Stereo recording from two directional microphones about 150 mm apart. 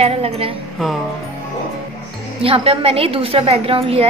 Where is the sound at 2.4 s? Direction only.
40° right (ahead or behind).